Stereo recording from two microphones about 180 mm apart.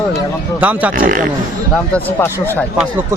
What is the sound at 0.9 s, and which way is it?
Speech, 50° right (ahead or behind).